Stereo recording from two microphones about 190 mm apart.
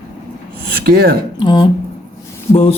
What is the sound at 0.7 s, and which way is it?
Speech, 55° right (ahead or behind).